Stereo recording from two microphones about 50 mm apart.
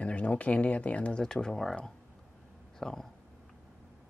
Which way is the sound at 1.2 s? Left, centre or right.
Centre.